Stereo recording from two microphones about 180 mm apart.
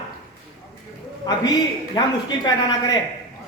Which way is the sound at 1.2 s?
20° left (ahead or behind).